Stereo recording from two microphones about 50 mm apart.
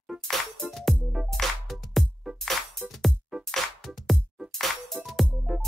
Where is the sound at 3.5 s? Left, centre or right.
Centre.